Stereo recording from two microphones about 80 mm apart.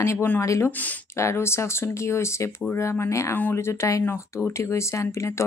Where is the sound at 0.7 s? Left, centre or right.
Left.